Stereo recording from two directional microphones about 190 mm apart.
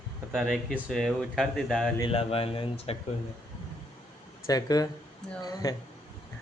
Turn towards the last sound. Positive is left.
turn(degrees=20)  # may be behind; listen again after turning